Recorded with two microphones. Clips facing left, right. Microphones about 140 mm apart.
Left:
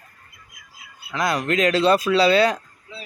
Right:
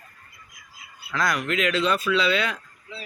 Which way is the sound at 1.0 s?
25° left (ahead or behind).